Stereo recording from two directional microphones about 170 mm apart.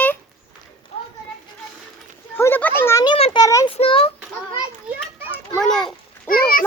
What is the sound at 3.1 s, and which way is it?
Speech, 35° left (ahead or behind).